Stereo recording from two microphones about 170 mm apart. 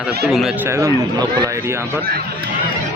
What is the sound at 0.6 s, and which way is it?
A man's voice, 15° right (ahead or behind).